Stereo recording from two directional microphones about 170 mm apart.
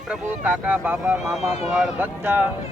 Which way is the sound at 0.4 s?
10° right (ahead or behind).